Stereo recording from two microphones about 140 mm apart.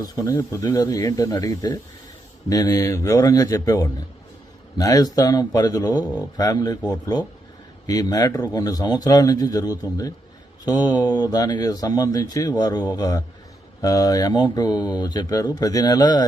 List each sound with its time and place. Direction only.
0.0 s speech: 25° left (ahead or behind)
7.9 s speech: 25° left (ahead or behind)